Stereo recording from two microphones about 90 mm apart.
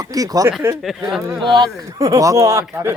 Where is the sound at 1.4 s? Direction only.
60° right (ahead or behind).